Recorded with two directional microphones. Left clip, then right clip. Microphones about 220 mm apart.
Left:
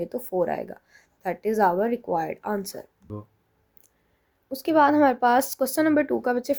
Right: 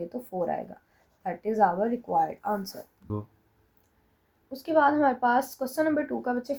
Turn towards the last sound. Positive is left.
turn(degrees=45)  # may be behind; listen again after turning